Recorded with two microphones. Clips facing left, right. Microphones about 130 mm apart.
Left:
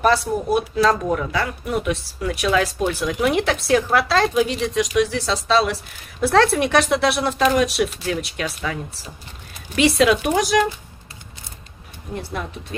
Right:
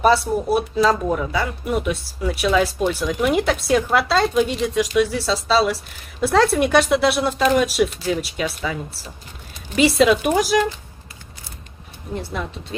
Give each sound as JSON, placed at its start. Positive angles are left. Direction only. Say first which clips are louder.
{"t": 0.0, "sound": "speech", "louder": "right 2 dB", "side_deg": -5}
{"t": 9.8, "sound": "speech", "louder": "right 1 dB", "side_deg": 0}
{"t": 12.2, "sound": "speech", "louder": "right 1 dB", "side_deg": 0}